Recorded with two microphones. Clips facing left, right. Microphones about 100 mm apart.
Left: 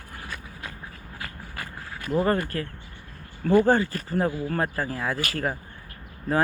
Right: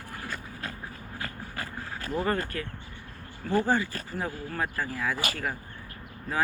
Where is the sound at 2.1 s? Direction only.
30° left (ahead or behind).